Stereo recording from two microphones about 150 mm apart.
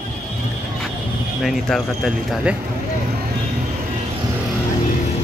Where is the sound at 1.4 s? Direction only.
Centre (ahead or behind).